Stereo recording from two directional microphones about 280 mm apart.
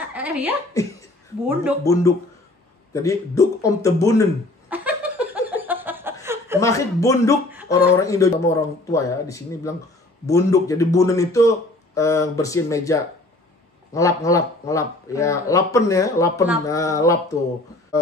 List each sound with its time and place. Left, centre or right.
0.1 s speech: centre
1.8 s speech: centre
4.6 s laughter: centre
6.2 s chuckle: centre
6.6 s speech: centre